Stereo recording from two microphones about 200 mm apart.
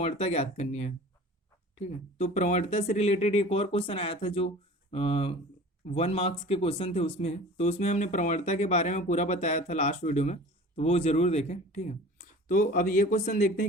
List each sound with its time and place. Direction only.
0.0 s speech: 30° left (ahead or behind)